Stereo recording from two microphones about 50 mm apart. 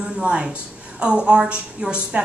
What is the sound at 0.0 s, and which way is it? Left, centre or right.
A woman's voice, right.